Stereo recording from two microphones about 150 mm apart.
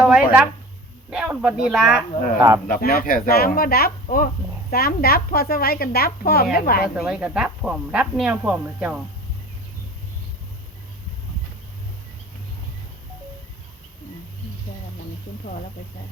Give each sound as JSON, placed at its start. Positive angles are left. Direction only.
{"t": 0.0, "sound": "a sound", "side_deg": -5}
{"t": 1.1, "sound": "speech", "side_deg": -5}
{"t": 2.6, "sound": "a woman's voice", "side_deg": 70}
{"t": 6.9, "sound": "speech", "side_deg": -5}